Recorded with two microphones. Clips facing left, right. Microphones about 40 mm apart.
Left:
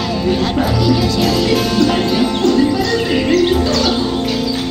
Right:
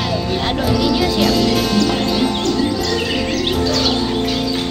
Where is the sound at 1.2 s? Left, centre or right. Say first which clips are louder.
Left 1 dB; centre.